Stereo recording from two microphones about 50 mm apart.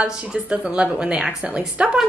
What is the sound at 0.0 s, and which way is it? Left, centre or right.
A woman's voice, centre.